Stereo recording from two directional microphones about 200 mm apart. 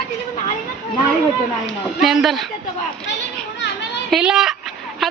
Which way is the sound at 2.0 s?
Centre (ahead or behind).